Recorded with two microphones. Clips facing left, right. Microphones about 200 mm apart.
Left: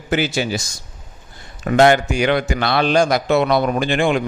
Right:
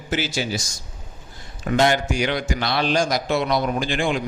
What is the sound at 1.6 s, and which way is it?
A man's voice, 60° left (ahead or behind).